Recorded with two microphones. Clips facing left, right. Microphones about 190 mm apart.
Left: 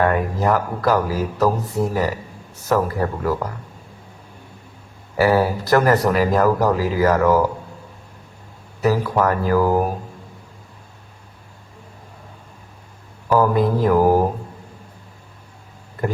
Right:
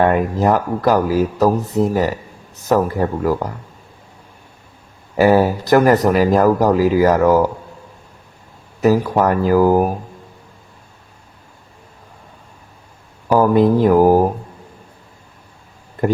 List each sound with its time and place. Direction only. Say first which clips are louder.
0.0 s speech: right 4 dB; 25° right (ahead or behind)
5.1 s speech: right 4 dB; 20° right (ahead or behind)
8.8 s speech: right 4 dB; 20° right (ahead or behind)
13.3 s speech: right 4 dB; 20° right (ahead or behind)